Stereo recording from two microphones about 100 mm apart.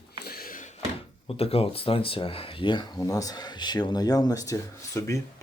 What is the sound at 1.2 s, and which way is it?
Speech, 75° left (ahead or behind).